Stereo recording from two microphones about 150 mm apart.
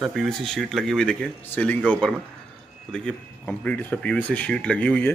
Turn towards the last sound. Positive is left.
turn(degrees=5)  # may be behind; listen again after turning